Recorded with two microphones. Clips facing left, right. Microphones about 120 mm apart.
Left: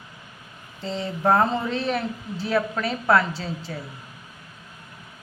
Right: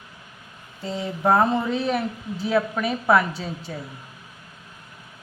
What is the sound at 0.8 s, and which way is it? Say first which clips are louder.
Speech: even; 10° right (ahead or behind).